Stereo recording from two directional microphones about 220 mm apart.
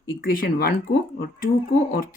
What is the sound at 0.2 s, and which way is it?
Speech, 40° left (ahead or behind).